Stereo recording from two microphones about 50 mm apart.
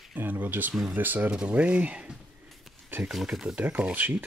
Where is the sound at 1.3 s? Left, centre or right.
Right.